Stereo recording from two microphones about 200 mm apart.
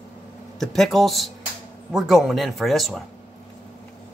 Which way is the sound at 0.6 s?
Centre (ahead or behind).